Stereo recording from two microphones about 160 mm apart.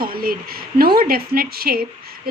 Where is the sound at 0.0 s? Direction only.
65° right (ahead or behind).